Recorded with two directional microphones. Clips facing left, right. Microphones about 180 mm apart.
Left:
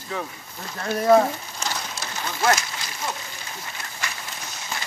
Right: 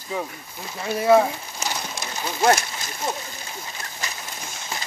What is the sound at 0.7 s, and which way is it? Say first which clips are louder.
Speech: even; 5° right (ahead or behind).